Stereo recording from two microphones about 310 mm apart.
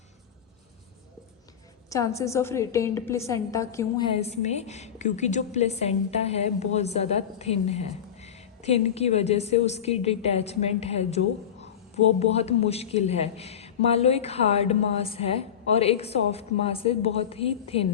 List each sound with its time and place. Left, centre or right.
1.9 s a woman's voice: centre
12.2 s a woman's voice: centre